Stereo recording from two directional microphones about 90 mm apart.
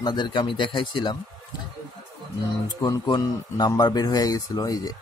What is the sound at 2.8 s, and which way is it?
Speech, 50° left (ahead or behind).